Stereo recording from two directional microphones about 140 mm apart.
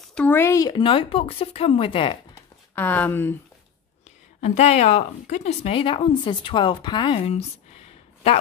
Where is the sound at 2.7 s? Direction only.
10° left (ahead or behind).